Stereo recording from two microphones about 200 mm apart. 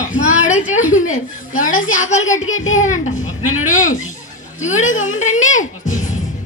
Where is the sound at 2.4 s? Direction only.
80° left.